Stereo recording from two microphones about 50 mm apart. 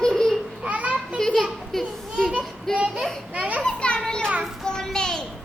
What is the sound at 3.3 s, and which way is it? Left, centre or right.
Speech, right.